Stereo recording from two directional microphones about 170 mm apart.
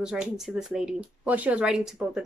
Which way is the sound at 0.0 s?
5° right (ahead or behind).